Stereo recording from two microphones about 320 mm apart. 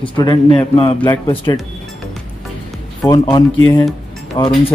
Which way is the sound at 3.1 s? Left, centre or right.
Centre.